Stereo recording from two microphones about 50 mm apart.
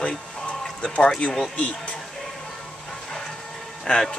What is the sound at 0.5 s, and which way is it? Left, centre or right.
Music, left.